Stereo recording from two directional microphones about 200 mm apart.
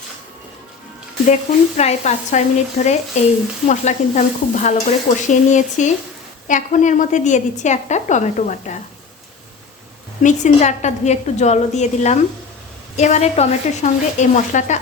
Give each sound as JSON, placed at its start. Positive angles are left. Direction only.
{"t": 1.3, "sound": "stir", "side_deg": 35}
{"t": 10.2, "sound": "stir", "side_deg": 35}